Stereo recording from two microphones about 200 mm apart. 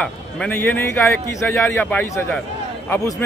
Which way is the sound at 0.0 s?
5° left (ahead or behind).